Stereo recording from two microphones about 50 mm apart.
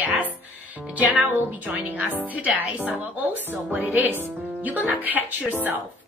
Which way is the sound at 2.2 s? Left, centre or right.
Right.